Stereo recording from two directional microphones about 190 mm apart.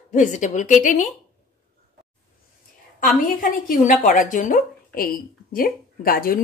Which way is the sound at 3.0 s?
45° left (ahead or behind).